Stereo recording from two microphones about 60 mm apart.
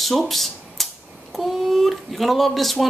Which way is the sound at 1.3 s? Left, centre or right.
Centre.